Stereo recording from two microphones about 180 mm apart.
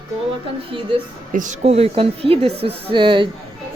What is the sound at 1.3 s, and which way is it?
A woman's voice, 45° right (ahead or behind).